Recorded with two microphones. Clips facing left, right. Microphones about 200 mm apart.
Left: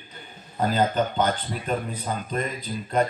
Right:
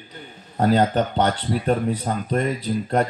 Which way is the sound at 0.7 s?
70° right (ahead or behind).